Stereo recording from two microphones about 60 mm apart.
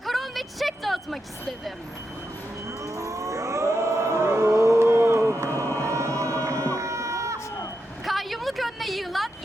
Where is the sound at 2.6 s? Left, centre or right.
Right.